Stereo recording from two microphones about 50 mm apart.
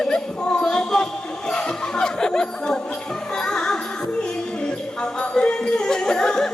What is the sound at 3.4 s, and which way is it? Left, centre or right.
Music, centre.